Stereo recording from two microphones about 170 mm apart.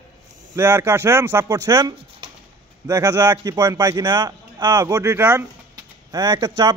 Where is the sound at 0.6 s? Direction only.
15° right (ahead or behind).